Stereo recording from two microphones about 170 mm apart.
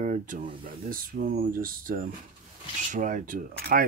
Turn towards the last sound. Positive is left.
turn(degrees=-55)  # may be behind; listen again after turning